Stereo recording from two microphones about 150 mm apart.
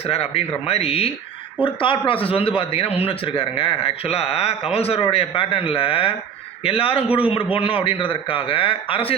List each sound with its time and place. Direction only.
0.0 s a man's voice: 40° left (ahead or behind)